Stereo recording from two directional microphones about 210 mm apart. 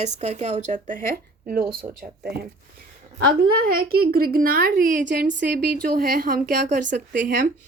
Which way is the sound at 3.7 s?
45° right (ahead or behind).